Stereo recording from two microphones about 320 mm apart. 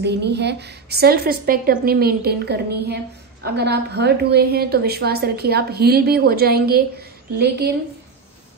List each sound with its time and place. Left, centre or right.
0.0 s a woman's voice: right